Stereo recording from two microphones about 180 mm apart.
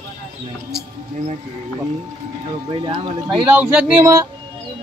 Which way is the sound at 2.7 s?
25° right (ahead or behind).